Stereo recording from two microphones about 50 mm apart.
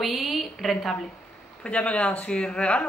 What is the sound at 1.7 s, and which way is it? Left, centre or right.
Speech, left.